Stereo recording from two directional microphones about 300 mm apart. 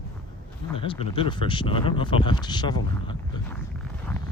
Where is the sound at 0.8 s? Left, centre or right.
Centre.